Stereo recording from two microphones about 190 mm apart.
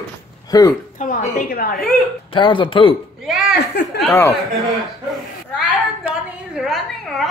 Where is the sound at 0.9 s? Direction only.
45° left (ahead or behind).